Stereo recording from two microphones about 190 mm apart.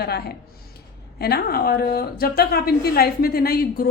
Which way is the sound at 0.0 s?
55° left (ahead or behind).